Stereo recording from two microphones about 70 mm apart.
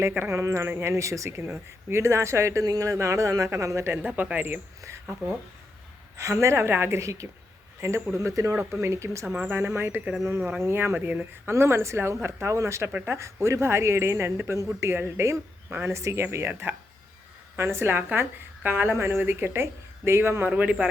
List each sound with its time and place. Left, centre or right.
0.2 s a woman's voice: right
3.9 s speech: right
6.1 s a man's voice: right
9.4 s speech: right
11.5 s a woman's voice: right
16.2 s speech: right
20.5 s speech: centre